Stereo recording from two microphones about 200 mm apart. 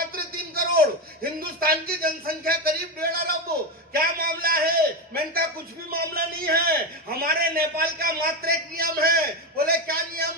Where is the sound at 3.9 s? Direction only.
50° right (ahead or behind).